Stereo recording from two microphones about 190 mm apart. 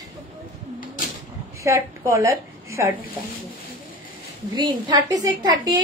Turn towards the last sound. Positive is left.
turn(degrees=-20)  # may be behind; listen again after turning